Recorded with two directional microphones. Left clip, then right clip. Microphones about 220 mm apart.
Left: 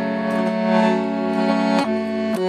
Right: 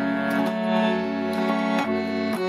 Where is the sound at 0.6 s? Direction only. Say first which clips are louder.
Left 5 dB; 20° left (ahead or behind).